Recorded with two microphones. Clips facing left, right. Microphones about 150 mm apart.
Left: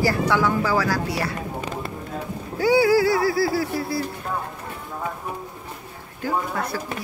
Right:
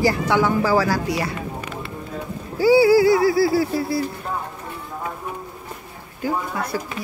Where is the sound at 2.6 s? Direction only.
5° right (ahead or behind); by 3.9 s 25° right (ahead or behind).